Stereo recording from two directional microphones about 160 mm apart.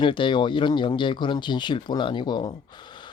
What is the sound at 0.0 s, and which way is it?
Speech, 30° left (ahead or behind).